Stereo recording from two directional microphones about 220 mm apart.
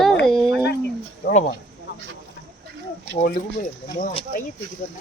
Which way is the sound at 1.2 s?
40° left (ahead or behind).